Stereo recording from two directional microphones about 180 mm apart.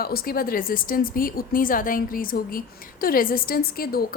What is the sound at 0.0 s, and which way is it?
A woman's voice, 55° left (ahead or behind).